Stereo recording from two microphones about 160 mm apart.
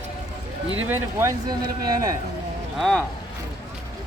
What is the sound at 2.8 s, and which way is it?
Speech, 5° left (ahead or behind).